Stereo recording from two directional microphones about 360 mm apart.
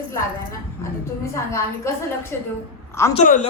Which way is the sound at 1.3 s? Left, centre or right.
Centre.